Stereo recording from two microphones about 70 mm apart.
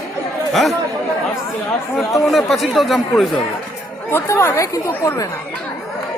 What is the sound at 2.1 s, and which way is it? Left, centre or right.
A man's voice, centre.